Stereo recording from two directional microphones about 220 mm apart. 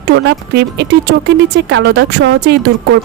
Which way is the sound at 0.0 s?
50° right (ahead or behind).